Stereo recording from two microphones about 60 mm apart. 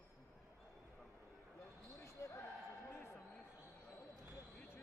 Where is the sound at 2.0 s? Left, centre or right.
Left.